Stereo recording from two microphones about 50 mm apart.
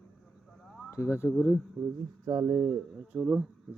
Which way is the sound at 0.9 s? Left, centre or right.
Left.